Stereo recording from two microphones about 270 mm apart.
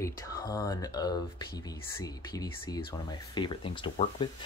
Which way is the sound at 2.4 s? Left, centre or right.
Centre.